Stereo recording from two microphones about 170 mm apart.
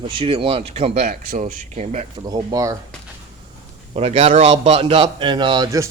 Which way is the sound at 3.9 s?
35° right (ahead or behind).